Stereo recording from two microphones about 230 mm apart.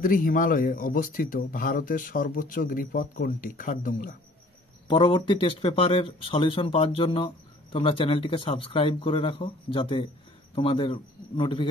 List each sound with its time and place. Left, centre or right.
0.0 s speech: left
4.8 s speech: left